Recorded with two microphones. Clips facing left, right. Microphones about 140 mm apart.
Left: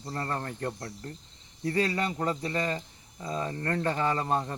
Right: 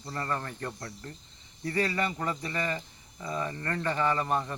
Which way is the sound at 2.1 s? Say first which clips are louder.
Left 3 dB; 35° left (ahead or behind).